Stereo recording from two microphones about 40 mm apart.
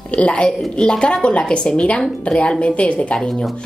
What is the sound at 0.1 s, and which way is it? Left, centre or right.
Speech, left.